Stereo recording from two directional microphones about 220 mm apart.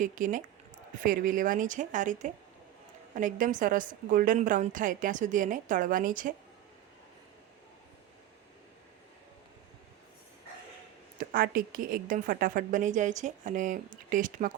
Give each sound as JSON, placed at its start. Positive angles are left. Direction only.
{"t": 0.0, "sound": "a woman's voice", "side_deg": -35}
{"t": 11.2, "sound": "a woman's voice", "side_deg": -40}